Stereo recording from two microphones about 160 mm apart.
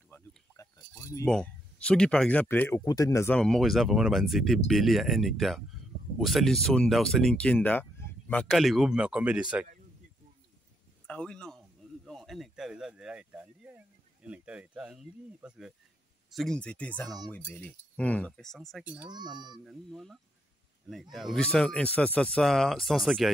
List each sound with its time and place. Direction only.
0.6 s a sound: 20° left (ahead or behind)
1.2 s speech: 5° left (ahead or behind)
3.3 s speech: 5° left (ahead or behind)
8.5 s speech: centre (ahead or behind)
11.1 s speech: 5° left (ahead or behind)
19.0 s a child's voice: 25° right (ahead or behind)
19.6 s speech: centre (ahead or behind)